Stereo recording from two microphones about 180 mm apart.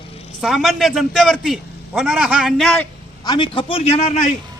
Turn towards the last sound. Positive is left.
turn(degrees=40)  # may be behind; listen again after turning